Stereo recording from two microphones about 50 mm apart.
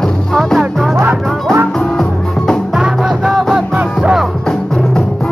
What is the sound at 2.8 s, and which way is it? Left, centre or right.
Music, centre.